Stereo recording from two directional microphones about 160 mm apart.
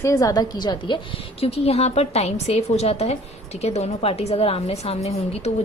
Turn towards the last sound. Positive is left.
turn(degrees=40)  # may be behind; listen again after turning